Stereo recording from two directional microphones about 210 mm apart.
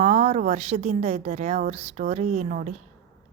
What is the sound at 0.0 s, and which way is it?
Speech, 30° right (ahead or behind).